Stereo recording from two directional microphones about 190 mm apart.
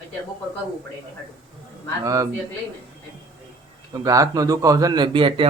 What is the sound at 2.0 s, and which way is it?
Speech, 15° right (ahead or behind).